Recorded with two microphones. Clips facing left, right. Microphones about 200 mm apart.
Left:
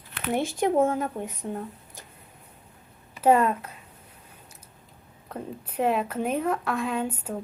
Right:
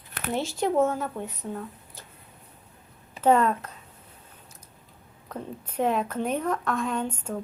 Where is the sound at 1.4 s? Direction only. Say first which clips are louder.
Left 2 dB; 20° left (ahead or behind).